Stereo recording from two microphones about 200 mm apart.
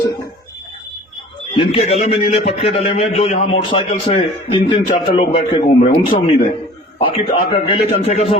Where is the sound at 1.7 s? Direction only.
30° left (ahead or behind).